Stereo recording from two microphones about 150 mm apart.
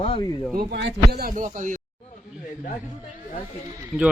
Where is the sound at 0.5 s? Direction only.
90° right; by 1.8 s 60° right (ahead or behind).